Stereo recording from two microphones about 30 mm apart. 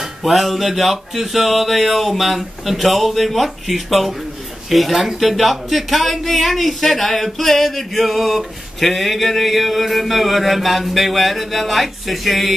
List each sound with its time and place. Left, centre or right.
0.2 s male singing: centre